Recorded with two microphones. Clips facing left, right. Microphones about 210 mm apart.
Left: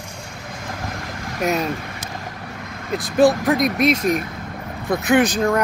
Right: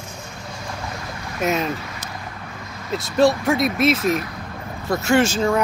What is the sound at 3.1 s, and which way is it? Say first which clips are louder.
Speech: left 2 dB; centre (ahead or behind).